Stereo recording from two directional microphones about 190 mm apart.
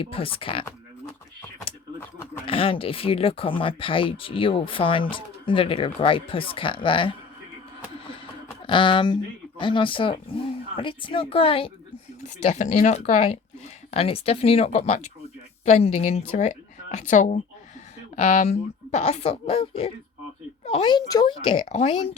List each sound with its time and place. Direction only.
0.0 s speech: 30° left (ahead or behind)
2.5 s speech: 30° left (ahead or behind)
7.9 s a sound: 30° left (ahead or behind)
8.6 s speech: 25° left (ahead or behind)